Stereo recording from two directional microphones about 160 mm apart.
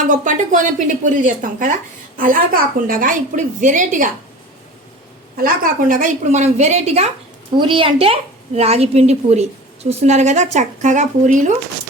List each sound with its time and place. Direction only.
0.1 s a woman's voice: 55° right (ahead or behind)
5.4 s a woman's voice: 60° right (ahead or behind)